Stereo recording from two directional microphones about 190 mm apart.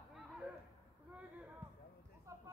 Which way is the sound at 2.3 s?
15° right (ahead or behind).